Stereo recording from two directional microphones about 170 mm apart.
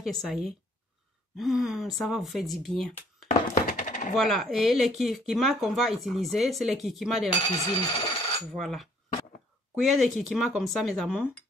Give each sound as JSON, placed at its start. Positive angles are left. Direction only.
{"t": 0.0, "sound": "speech", "side_deg": 0}
{"t": 3.3, "sound": "thunk", "side_deg": 50}
{"t": 4.1, "sound": "speech", "side_deg": 0}
{"t": 7.4, "sound": "speech", "side_deg": 20}
{"t": 8.5, "sound": "speech", "side_deg": 0}